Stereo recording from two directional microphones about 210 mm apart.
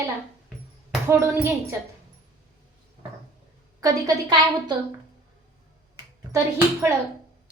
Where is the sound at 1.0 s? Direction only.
10° right (ahead or behind).